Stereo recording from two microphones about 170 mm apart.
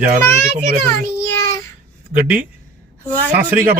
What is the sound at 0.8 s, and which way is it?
Speech, 15° left (ahead or behind).